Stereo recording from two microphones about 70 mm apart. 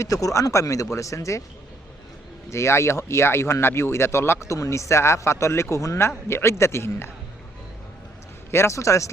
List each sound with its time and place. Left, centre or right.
0.0 s speech: left
2.5 s speech: left
8.4 s speech: left